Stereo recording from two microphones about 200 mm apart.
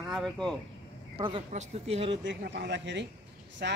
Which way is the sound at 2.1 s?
65° right (ahead or behind).